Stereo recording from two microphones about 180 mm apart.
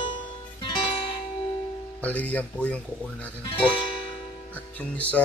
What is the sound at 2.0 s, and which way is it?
Speech, 10° left (ahead or behind).